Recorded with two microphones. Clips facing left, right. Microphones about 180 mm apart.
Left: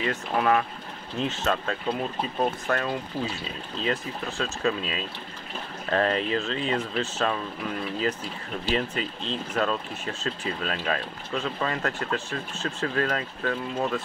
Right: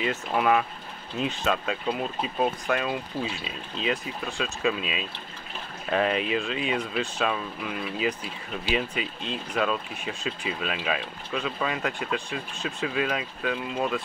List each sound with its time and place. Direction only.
0.0 s speech: 15° right (ahead or behind)